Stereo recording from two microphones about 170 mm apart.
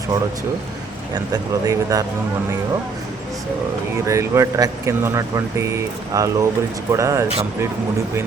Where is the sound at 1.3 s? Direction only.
20° right (ahead or behind).